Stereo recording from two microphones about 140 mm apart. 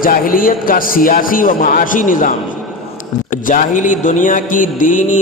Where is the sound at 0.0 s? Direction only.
90° left; by 2.3 s 70° left (ahead or behind).